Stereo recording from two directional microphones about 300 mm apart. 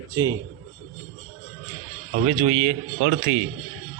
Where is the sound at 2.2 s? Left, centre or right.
Centre.